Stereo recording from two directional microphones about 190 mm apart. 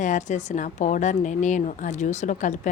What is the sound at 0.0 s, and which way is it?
A woman's voice, 40° left (ahead or behind).